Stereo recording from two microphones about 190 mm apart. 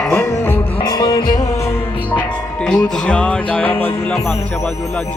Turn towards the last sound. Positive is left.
turn(degrees=10)  # may be behind; listen again after turning